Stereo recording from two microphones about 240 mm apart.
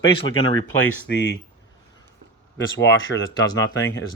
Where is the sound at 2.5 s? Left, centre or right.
Left.